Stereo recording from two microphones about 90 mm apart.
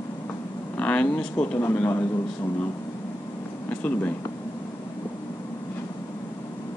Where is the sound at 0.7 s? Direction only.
15° left (ahead or behind).